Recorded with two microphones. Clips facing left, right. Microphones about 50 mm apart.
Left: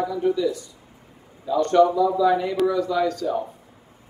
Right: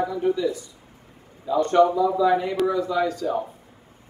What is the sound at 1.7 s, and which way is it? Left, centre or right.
Speech, right.